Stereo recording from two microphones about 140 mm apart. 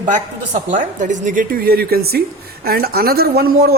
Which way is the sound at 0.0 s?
65° right (ahead or behind).